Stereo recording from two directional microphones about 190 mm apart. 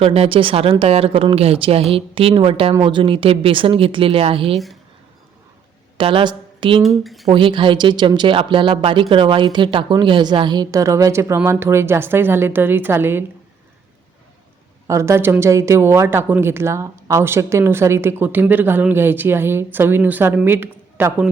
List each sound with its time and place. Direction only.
0.0 s speech: 30° right (ahead or behind)
4.5 s speech: centre (ahead or behind)
6.0 s a woman's voice: 30° right (ahead or behind)
6.8 s speech: centre (ahead or behind)
7.3 s speech: 25° right (ahead or behind); by 13.2 s 10° right (ahead or behind)
14.8 s speech: 15° right (ahead or behind)